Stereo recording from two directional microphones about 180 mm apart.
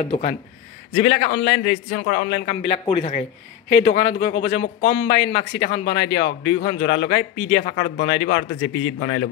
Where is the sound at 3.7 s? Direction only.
75° left (ahead or behind).